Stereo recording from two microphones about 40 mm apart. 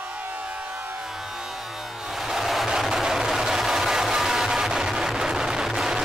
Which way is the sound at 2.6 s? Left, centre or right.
Centre.